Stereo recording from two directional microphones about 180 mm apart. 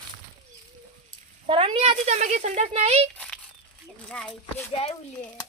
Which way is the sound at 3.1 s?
5° left (ahead or behind).